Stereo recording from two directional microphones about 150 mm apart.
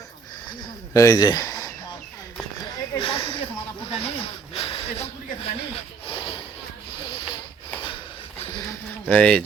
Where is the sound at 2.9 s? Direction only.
35° left (ahead or behind).